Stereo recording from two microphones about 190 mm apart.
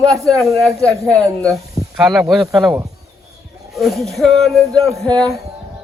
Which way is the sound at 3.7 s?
Centre (ahead or behind).